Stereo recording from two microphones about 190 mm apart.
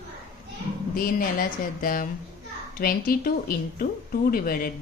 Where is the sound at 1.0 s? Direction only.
50° left (ahead or behind).